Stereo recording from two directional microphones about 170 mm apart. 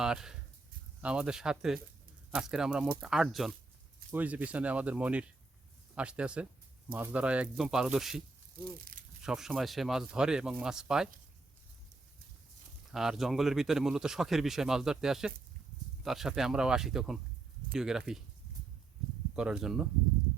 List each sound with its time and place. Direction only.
0.0 s speech: 5° right (ahead or behind)
8.8 s crumpling: 55° right (ahead or behind)
9.2 s speech: 5° right (ahead or behind)
12.9 s speech: centre (ahead or behind)
19.4 s speech: 5° right (ahead or behind)